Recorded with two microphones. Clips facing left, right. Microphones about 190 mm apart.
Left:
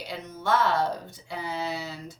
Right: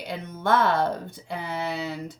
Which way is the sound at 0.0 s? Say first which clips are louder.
Right 3 dB; 55° right (ahead or behind).